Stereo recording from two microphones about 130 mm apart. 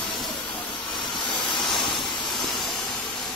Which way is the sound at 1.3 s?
35° left (ahead or behind).